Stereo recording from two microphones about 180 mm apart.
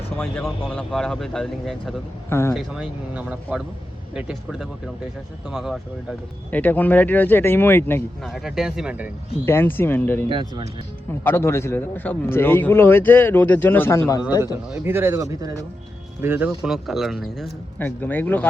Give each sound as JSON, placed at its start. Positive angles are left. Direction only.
{"t": 0.2, "sound": "speech", "side_deg": 10}
{"t": 8.2, "sound": "speech", "side_deg": 0}
{"t": 9.5, "sound": "speech", "side_deg": 10}
{"t": 10.2, "sound": "speech", "side_deg": -25}
{"t": 11.2, "sound": "speech", "side_deg": 15}
{"t": 14.8, "sound": "speech", "side_deg": -15}
{"t": 16.6, "sound": "speech", "side_deg": 0}